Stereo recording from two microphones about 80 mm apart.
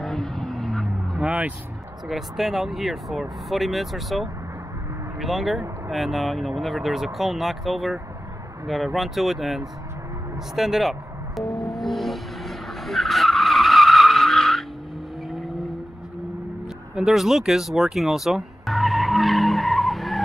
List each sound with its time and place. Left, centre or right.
0.0 s vehicle: centre
1.2 s speech: centre
2.0 s speech: centre
11.7 s skidding: centre
15.2 s vehicle: centre
16.9 s music: centre